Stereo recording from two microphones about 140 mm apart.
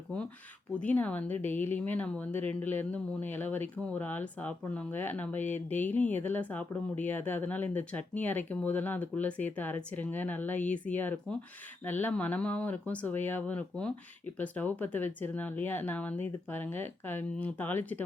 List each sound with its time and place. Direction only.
0.8 s a woman's voice: 10° left (ahead or behind)